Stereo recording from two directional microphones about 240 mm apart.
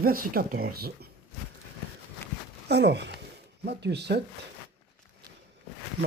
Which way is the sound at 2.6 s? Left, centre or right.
Right.